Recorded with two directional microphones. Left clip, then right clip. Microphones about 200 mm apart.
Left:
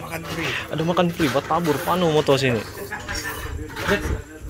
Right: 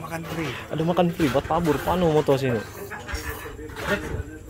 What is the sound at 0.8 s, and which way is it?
Speech, 20° right (ahead or behind).